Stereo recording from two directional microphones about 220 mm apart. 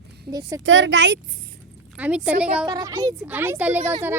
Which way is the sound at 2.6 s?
20° right (ahead or behind).